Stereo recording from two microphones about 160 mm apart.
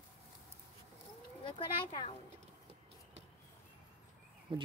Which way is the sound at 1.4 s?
30° left (ahead or behind).